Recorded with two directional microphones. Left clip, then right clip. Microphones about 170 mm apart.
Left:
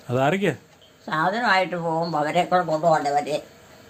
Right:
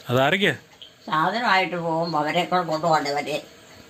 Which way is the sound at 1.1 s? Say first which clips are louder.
Even; 20° left (ahead or behind).